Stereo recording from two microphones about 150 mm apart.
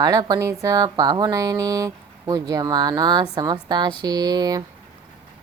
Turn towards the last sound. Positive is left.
turn(degrees=-25)  # may be behind; listen again after turning